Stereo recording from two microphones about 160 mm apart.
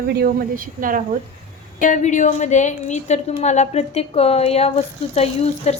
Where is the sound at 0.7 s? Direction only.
60° right (ahead or behind).